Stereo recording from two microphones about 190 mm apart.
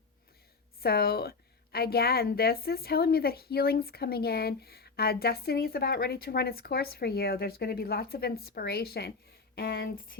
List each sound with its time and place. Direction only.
0.8 s a woman's voice: 55° left (ahead or behind)